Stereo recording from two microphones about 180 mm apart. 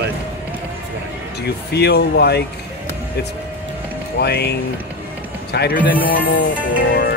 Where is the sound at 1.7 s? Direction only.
65° left (ahead or behind).